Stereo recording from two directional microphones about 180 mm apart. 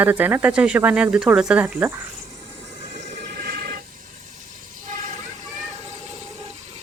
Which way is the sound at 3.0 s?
50° right (ahead or behind).